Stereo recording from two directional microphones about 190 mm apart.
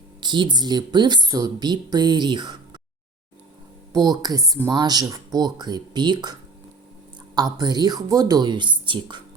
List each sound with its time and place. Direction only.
0.2 s speech: 25° right (ahead or behind)
4.0 s speech: 20° right (ahead or behind)
7.3 s speech: 20° right (ahead or behind)